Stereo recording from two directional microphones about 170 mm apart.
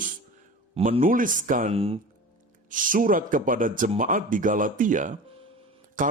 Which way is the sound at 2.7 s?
50° right (ahead or behind).